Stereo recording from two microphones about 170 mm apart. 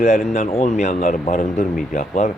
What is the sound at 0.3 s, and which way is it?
Speech, 40° left (ahead or behind).